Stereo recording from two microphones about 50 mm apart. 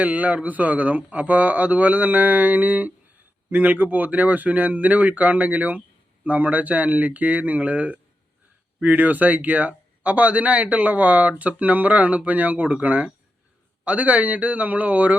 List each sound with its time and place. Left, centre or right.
0.0 s a man's voice: right